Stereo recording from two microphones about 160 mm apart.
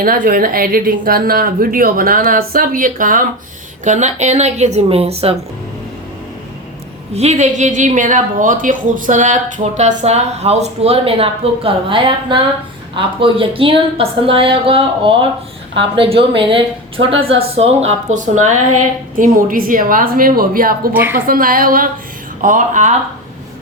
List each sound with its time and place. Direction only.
0.0 s a woman's voice: 60° right (ahead or behind)
3.8 s a woman's voice: 45° right (ahead or behind)
7.1 s a woman's voice: 45° right (ahead or behind); by 20.9 s 65° right (ahead or behind)
20.9 s a woman's voice: 15° right (ahead or behind)
21.2 s a woman's voice: 65° right (ahead or behind)